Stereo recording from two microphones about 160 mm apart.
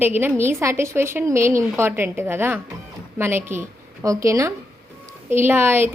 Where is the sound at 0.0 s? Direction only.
10° right (ahead or behind).